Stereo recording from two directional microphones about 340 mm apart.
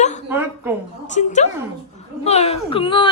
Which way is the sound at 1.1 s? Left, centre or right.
Left.